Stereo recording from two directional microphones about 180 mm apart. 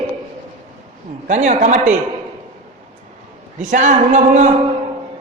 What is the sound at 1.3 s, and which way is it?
Speech, 40° right (ahead or behind).